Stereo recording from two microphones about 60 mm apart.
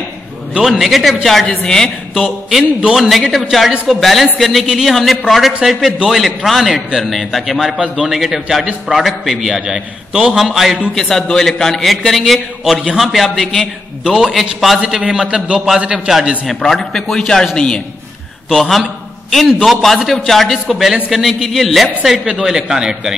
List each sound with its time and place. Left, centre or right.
0.6 s a man's voice: centre
2.1 s a man's voice: centre
14.1 s a man's voice: centre
16.4 s a man's voice: centre
18.5 s a man's voice: centre